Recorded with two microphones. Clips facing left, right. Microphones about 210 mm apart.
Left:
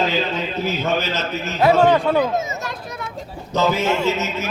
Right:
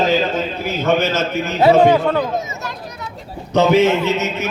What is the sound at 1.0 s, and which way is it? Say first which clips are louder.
Speech: right 6 dB; 45° right (ahead or behind).